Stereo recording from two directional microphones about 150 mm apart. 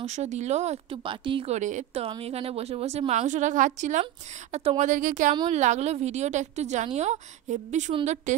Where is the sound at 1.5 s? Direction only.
50° right (ahead or behind).